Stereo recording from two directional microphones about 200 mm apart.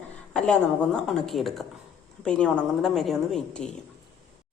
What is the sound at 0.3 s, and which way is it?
A woman's voice, 5° left (ahead or behind).